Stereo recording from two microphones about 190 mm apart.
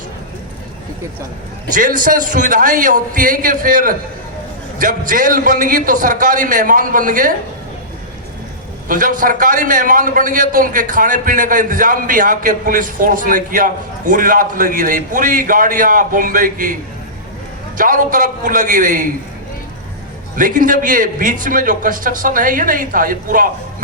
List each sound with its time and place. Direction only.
1.7 s a man's voice: 45° right (ahead or behind)
8.9 s a man's voice: 45° right (ahead or behind)
17.7 s a man's voice: 45° right (ahead or behind)
20.3 s a man's voice: 45° right (ahead or behind)